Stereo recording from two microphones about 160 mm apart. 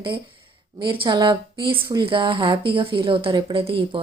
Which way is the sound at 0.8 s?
30° right (ahead or behind).